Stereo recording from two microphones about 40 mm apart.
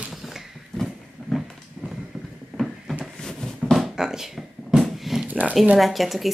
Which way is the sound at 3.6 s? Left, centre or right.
Centre.